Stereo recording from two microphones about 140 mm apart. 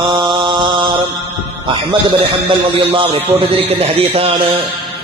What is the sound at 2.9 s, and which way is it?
A man's voice, 40° right (ahead or behind).